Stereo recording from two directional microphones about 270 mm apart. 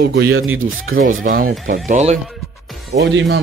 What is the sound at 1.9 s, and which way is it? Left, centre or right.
Speech, right.